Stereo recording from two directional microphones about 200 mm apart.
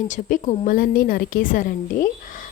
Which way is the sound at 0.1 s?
40° left (ahead or behind).